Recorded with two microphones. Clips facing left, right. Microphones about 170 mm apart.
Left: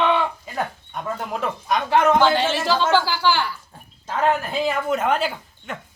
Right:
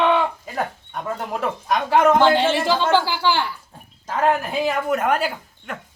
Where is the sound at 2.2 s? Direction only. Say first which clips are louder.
Right 2 dB; 20° right (ahead or behind).